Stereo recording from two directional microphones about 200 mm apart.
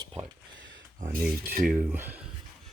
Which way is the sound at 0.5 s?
65° right (ahead or behind).